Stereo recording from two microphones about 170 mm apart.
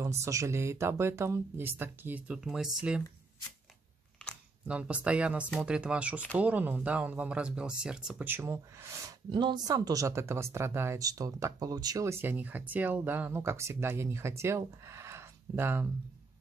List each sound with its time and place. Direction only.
0.0 s speech: 15° right (ahead or behind)
4.6 s speech: 5° right (ahead or behind)
9.3 s speech: 25° right (ahead or behind)